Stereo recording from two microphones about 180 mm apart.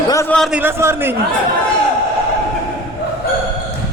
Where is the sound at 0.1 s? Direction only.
15° left (ahead or behind).